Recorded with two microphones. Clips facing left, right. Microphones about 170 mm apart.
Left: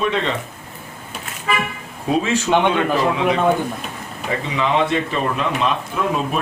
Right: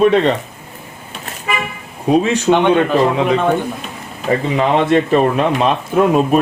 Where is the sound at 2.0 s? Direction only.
35° right (ahead or behind).